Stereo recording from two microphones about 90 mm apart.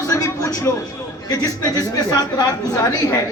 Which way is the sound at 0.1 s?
35° left (ahead or behind).